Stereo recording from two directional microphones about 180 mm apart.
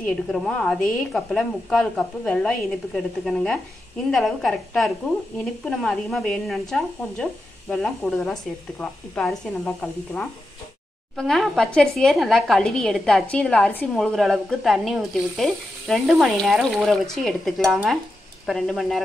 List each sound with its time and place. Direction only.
0.0 s speech: 5° left (ahead or behind)